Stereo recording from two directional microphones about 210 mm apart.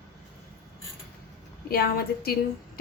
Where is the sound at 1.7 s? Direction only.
50° left (ahead or behind).